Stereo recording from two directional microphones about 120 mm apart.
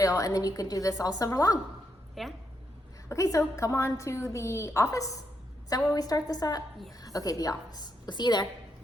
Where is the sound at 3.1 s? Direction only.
25° left (ahead or behind).